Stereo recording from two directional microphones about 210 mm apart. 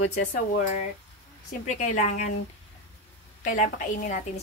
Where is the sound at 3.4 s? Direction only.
40° left (ahead or behind).